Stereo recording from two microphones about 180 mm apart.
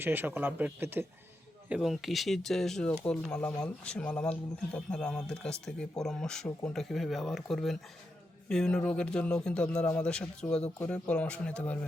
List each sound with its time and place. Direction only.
0.0 s speech: 10° right (ahead or behind)
1.7 s speech: centre (ahead or behind)